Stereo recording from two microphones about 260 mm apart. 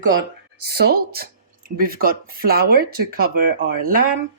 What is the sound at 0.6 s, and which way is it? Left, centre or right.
Speech, right.